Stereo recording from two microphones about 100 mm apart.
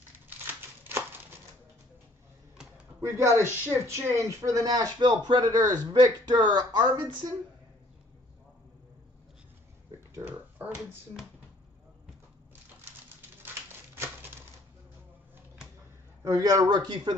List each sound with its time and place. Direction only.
3.0 s speech: 30° right (ahead or behind)
4.9 s speech: 45° right (ahead or behind)
10.2 s a sound: 20° right (ahead or behind)
16.3 s a man's voice: 35° right (ahead or behind)